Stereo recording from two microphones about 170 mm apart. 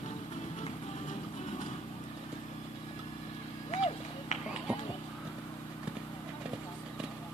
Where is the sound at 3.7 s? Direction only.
40° left (ahead or behind).